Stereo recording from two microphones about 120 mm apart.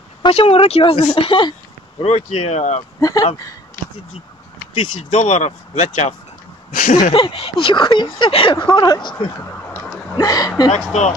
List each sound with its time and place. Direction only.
0.3 s speech: 55° left (ahead or behind)
2.0 s speech: 55° left (ahead or behind)
3.0 s speech: 30° left (ahead or behind)
5.1 s speech: 70° left (ahead or behind)
6.7 s speech: 90° left
7.2 s speech: 45° left (ahead or behind)
9.1 s speech: 15° left (ahead or behind)
10.2 s speech: 30° left (ahead or behind)
10.9 s speech: 70° left (ahead or behind)